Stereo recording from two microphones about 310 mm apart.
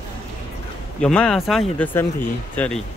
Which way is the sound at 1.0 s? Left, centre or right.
Centre.